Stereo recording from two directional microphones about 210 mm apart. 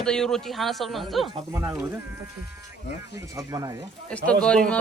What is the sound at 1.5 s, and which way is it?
Speech, 10° right (ahead or behind).